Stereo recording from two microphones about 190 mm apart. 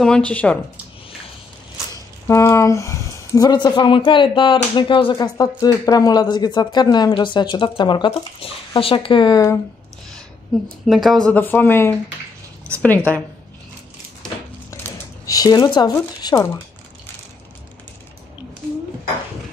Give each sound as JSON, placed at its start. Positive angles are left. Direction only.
{"t": 0.0, "sound": "speech", "side_deg": 5}
{"t": 2.2, "sound": "speech", "side_deg": 15}
{"t": 10.5, "sound": "a woman's voice", "side_deg": 0}
{"t": 14.7, "sound": "a sound", "side_deg": 15}